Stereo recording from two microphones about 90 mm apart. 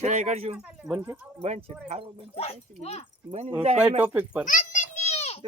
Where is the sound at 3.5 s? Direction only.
25° right (ahead or behind).